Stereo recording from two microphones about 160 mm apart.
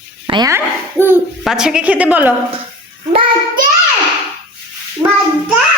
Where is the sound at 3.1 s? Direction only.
35° right (ahead or behind).